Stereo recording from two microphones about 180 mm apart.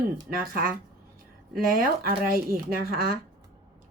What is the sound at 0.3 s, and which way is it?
A woman's voice, 55° right (ahead or behind).